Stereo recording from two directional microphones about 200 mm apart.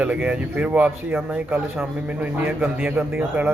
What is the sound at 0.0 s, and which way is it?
Speech, 5° right (ahead or behind).